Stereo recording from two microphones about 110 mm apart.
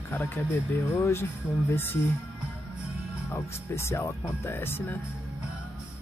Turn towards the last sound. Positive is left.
turn(degrees=20)  # may be behind; listen again after turning